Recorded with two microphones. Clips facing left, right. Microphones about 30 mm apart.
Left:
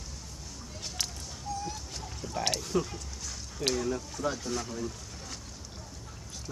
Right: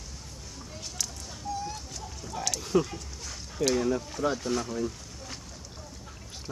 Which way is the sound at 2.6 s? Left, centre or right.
Centre.